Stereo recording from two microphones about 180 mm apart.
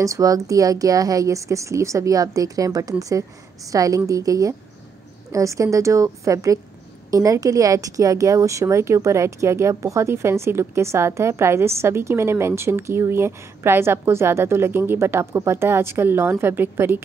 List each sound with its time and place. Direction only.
0.0 s a woman's voice: 20° right (ahead or behind)